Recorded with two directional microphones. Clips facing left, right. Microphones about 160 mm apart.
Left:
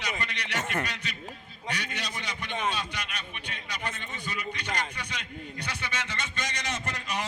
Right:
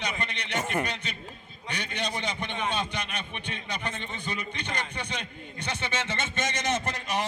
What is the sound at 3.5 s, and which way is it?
A man's voice, 25° right (ahead or behind).